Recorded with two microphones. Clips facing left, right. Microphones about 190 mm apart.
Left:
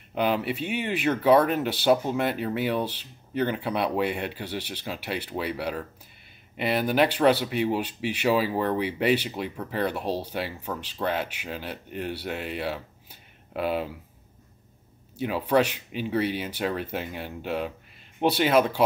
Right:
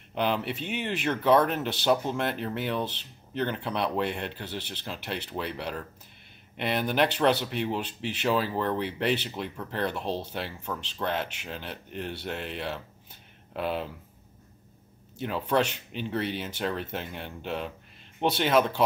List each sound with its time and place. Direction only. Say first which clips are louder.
0.1 s speech: left 3 dB; 5° left (ahead or behind)
15.1 s speech: left 3 dB; 5° left (ahead or behind)